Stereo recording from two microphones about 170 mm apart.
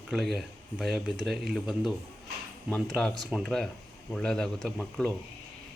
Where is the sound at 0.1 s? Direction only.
Centre (ahead or behind).